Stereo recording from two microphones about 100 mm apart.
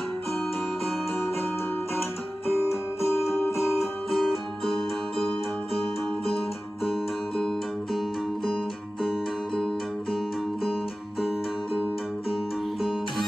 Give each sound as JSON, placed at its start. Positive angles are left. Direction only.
{"t": 1.1, "sound": "music", "side_deg": 20}
{"t": 2.5, "sound": "music", "side_deg": 25}
{"t": 4.1, "sound": "music", "side_deg": 0}
{"t": 6.8, "sound": "music", "side_deg": 0}
{"t": 10.1, "sound": "music", "side_deg": 0}